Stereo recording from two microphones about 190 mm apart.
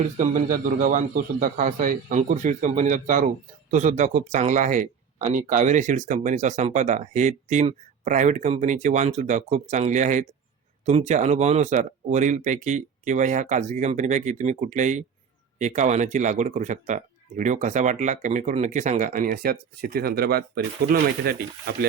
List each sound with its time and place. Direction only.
0.2 s a man's voice: 45° right (ahead or behind)